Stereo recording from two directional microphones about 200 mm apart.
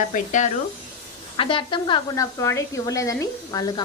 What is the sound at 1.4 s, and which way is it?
A woman's voice, 25° left (ahead or behind).